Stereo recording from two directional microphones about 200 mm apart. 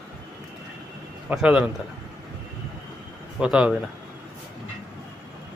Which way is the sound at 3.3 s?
5° right (ahead or behind).